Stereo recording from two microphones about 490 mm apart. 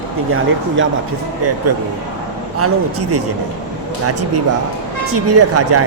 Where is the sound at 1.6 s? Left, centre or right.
Right.